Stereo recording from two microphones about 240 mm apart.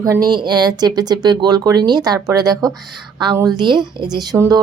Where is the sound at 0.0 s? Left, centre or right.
Centre.